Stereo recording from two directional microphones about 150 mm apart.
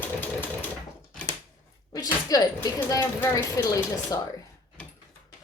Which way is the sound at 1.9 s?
25° left (ahead or behind).